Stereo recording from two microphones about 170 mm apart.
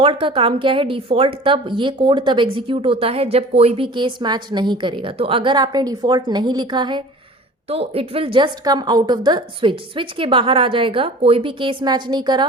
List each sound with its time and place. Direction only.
0.0 s a woman's voice: 30° right (ahead or behind)